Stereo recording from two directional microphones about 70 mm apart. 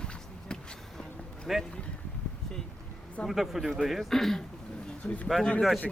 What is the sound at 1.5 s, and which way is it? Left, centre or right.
Speech, centre.